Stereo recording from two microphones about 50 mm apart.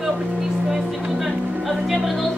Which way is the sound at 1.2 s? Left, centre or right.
Centre.